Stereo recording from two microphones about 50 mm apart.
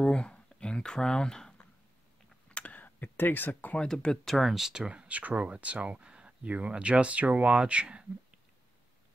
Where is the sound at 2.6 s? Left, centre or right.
Left.